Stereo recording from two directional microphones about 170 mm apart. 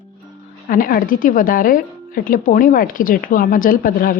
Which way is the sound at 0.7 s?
55° left (ahead or behind).